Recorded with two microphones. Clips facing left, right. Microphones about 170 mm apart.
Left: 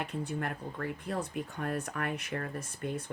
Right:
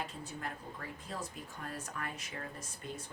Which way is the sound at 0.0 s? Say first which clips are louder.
Left 7 dB; 65° left (ahead or behind).